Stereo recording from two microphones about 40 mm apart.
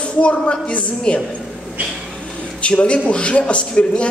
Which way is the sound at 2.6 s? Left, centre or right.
Left.